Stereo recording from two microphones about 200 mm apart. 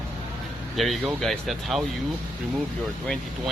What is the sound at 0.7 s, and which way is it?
Speech, centre (ahead or behind).